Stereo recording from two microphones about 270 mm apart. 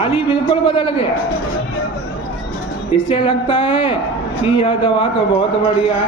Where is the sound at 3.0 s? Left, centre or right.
Centre.